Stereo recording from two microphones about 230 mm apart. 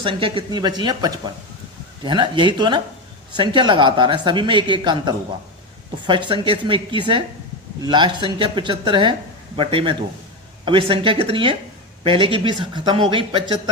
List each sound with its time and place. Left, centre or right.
0.0 s speech: right